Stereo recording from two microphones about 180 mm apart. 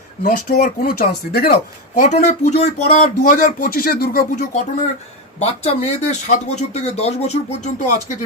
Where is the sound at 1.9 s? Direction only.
45° left (ahead or behind).